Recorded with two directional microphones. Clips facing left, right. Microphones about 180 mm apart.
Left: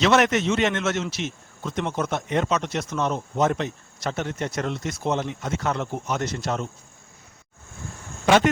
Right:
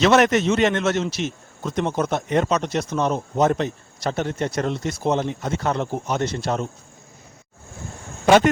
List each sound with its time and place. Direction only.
0.0 s a man's voice: 40° right (ahead or behind)